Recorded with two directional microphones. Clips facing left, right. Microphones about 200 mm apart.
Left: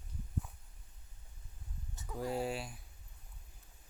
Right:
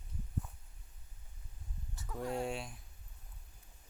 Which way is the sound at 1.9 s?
20° left (ahead or behind).